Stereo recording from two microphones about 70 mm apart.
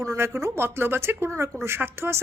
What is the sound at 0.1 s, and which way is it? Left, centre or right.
A woman's voice, right.